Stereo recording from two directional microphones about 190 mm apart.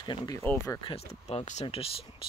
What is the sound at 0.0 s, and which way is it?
Speech, 20° left (ahead or behind).